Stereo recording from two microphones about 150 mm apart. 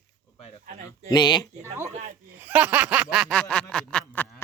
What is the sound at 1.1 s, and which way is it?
Speech, 30° left (ahead or behind).